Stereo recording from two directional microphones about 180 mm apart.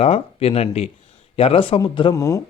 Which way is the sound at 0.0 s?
35° left (ahead or behind).